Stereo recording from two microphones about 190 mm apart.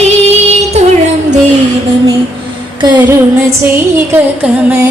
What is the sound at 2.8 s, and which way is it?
Music, 25° right (ahead or behind).